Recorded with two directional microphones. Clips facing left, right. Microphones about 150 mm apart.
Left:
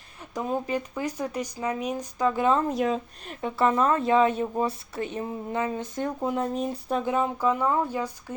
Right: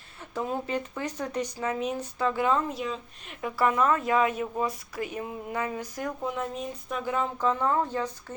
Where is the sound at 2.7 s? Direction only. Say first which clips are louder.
Left 7 dB; 45° left (ahead or behind).